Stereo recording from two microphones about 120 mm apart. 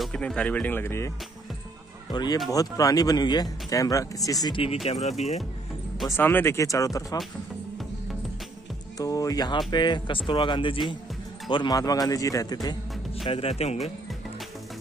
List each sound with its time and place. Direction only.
0.0 s speech: 5° left (ahead or behind); by 1.1 s 20° left (ahead or behind)
2.1 s speech: 35° left (ahead or behind)
4.8 s speech: 70° left (ahead or behind)
6.0 s speech: 20° left (ahead or behind)
8.9 s speech: 30° left (ahead or behind); by 10.8 s 45° left (ahead or behind)
11.5 s speech: 35° left (ahead or behind)
13.2 s speech: 50° left (ahead or behind)